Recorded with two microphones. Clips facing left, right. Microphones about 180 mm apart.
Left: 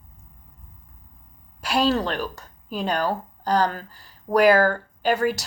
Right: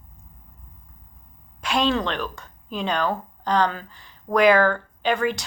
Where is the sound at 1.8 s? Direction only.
40° left (ahead or behind).